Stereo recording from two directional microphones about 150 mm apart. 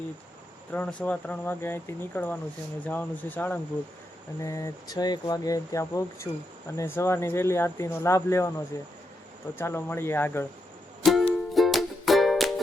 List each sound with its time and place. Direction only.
0.7 s speech: 10° left (ahead or behind)
11.0 s music: centre (ahead or behind)